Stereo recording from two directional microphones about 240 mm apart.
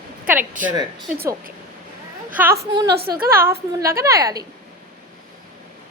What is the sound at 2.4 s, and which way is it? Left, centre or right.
Speech, centre.